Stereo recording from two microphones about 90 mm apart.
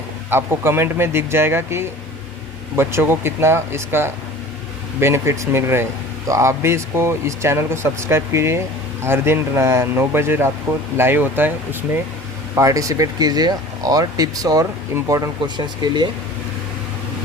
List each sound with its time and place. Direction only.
0.3 s speech: 25° right (ahead or behind)
12.5 s speech: 40° right (ahead or behind)
15.4 s speech: 55° right (ahead or behind)